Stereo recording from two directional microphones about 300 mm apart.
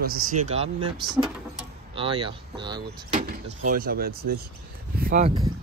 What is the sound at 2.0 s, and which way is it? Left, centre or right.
Speech, centre.